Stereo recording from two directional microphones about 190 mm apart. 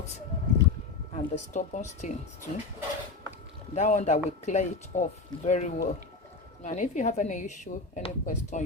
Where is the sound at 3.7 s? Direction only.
35° left (ahead or behind).